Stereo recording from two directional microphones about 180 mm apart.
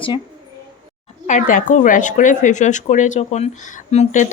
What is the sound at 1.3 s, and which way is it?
A woman's voice, 50° left (ahead or behind).